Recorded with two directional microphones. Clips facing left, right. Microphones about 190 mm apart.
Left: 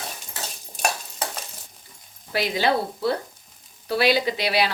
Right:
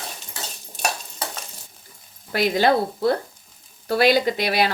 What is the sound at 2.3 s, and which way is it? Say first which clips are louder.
Speech: right 4 dB; 50° right (ahead or behind).